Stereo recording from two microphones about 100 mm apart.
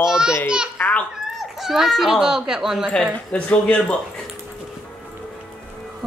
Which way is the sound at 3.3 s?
10° left (ahead or behind).